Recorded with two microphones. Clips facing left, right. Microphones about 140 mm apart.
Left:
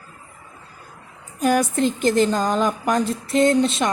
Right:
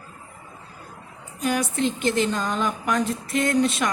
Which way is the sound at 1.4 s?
40° left (ahead or behind).